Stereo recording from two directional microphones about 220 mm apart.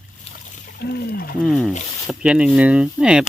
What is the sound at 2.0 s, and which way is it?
Speech, 5° right (ahead or behind).